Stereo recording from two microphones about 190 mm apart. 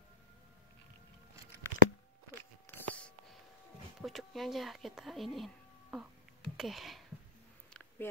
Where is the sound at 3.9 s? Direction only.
Centre (ahead or behind).